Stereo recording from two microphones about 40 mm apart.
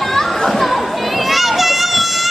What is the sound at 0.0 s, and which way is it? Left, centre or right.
Children playing, centre.